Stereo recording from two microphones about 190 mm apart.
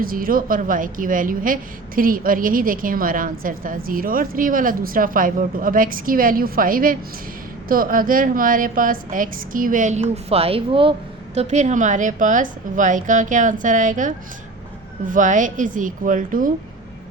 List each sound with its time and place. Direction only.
0.0 s a woman's voice: 50° right (ahead or behind)